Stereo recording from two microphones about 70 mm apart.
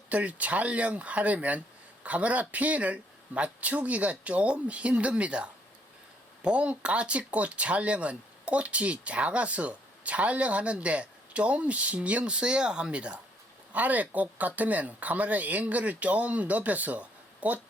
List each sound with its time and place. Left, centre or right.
0.1 s speech: right